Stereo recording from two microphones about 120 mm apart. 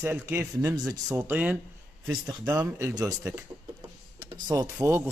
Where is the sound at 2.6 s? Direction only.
20° right (ahead or behind).